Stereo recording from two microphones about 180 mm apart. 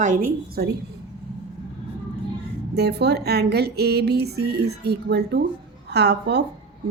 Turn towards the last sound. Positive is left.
turn(degrees=-70)  # may be behind; listen again after turning